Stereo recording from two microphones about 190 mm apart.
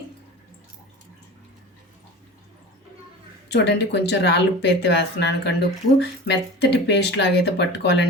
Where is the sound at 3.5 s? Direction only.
60° left (ahead or behind).